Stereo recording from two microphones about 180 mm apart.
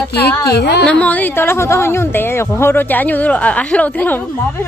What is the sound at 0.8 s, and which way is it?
A woman's voice, 5° left (ahead or behind).